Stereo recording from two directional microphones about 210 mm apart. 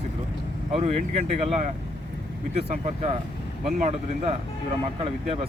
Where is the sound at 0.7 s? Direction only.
30° right (ahead or behind).